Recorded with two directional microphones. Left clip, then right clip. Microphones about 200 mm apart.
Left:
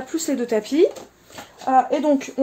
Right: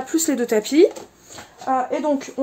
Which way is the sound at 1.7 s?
10° left (ahead or behind).